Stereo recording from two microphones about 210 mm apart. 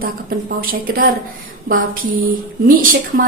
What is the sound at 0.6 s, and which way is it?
A woman's voice, 45° right (ahead or behind).